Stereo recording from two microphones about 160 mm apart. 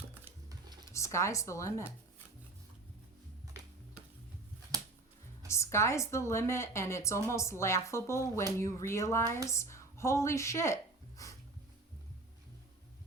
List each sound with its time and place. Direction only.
0.9 s speech: 20° left (ahead or behind)
5.5 s a woman's voice: 15° left (ahead or behind)
11.2 s music: 20° left (ahead or behind)